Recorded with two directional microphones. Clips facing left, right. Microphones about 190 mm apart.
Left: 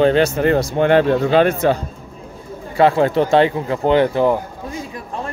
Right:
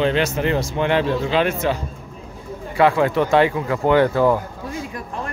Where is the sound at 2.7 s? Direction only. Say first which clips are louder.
Left 2 dB; 30° left (ahead or behind).